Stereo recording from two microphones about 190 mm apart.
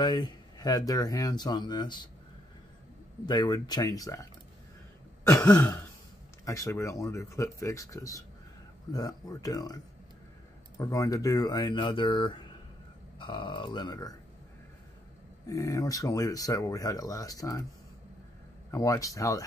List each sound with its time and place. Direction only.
0.0 s speech: 20° left (ahead or behind)
3.3 s speech: 20° left (ahead or behind)
10.8 s speech: 20° left (ahead or behind)
15.4 s speech: 15° left (ahead or behind)
18.7 s speech: 15° left (ahead or behind)